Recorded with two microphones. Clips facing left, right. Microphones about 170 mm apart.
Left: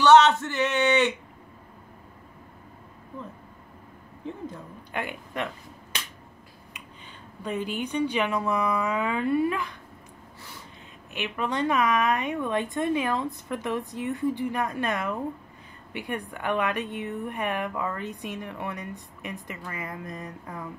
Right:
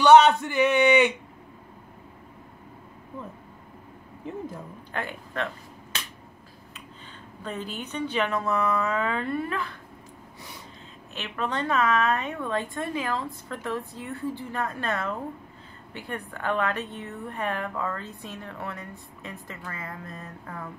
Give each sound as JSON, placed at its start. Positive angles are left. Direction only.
{"t": 0.0, "sound": "speech", "side_deg": -10}
{"t": 4.9, "sound": "a woman's voice", "side_deg": 15}
{"t": 7.4, "sound": "a woman's voice", "side_deg": 10}
{"t": 11.1, "sound": "a woman's voice", "side_deg": 10}